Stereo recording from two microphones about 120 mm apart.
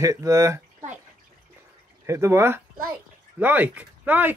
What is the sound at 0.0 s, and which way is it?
Speech, 30° right (ahead or behind).